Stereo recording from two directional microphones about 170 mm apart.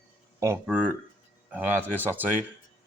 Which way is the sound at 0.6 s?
5° right (ahead or behind).